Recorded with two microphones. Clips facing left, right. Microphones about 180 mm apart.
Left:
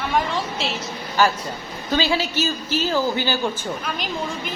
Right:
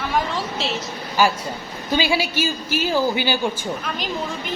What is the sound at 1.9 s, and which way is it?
A woman's voice, 10° right (ahead or behind).